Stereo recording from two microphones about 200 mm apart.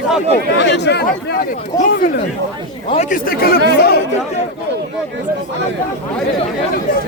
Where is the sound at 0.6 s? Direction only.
60° left (ahead or behind).